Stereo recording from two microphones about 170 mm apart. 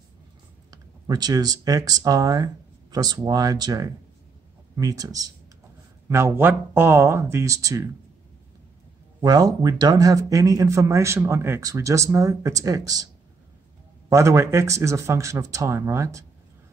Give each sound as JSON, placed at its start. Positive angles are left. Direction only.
{"t": 0.7, "sound": "speech", "side_deg": -25}
{"t": 9.2, "sound": "speech", "side_deg": -25}